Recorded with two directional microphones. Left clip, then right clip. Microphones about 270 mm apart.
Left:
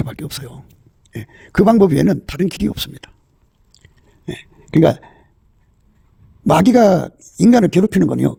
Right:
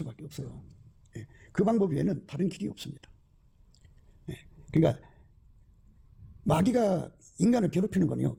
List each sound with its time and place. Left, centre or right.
0.1 s speech: left
3.8 s a sound: left
4.8 s speech: left
6.5 s speech: left